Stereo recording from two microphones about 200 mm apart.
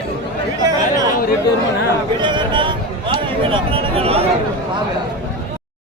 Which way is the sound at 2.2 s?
25° right (ahead or behind).